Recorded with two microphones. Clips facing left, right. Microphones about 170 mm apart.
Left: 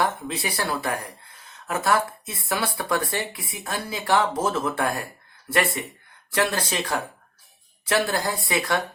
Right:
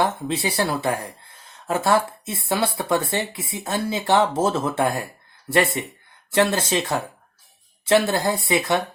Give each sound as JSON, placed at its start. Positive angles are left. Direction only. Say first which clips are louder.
{"t": 0.0, "sound": "speech", "louder": "right 3 dB", "side_deg": -25}